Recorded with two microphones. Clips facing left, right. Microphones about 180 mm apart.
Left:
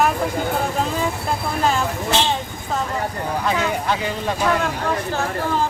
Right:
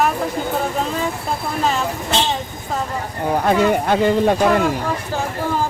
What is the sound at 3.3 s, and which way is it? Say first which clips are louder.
Speech: right 7 dB; 55° right (ahead or behind).